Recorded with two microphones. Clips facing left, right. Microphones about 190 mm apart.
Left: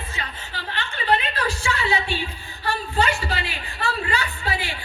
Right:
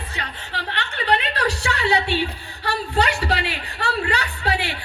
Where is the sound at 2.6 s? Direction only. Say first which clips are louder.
Right 1 dB; 70° right (ahead or behind).